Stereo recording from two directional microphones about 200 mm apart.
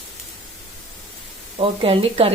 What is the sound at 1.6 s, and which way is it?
Speech, 25° right (ahead or behind).